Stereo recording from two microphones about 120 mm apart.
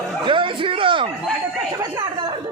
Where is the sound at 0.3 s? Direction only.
45° right (ahead or behind).